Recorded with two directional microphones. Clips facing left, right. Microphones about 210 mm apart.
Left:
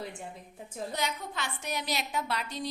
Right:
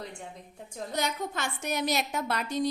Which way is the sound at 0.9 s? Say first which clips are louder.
Right 5 dB; 45° right (ahead or behind).